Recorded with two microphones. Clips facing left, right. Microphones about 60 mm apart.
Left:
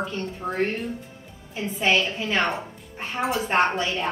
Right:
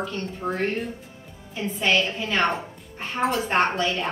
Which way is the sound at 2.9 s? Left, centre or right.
Centre.